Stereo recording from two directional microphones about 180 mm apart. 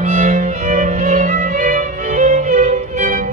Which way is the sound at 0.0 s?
45° right (ahead or behind).